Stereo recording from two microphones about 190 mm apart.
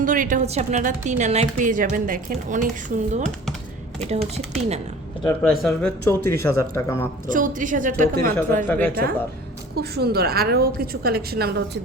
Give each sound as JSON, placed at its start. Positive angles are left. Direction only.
{"t": 0.0, "sound": "a woman's voice", "side_deg": -45}
{"t": 5.4, "sound": "a man's voice", "side_deg": 5}
{"t": 7.3, "sound": "a woman's voice", "side_deg": -45}
{"t": 8.6, "sound": "a man's voice", "side_deg": 10}
{"t": 9.7, "sound": "a woman's voice", "side_deg": -55}